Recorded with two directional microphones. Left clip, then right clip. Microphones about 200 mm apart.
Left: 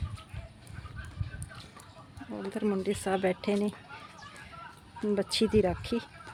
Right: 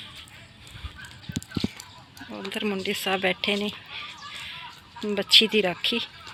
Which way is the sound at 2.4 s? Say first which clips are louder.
Right 3 dB; 15° left (ahead or behind).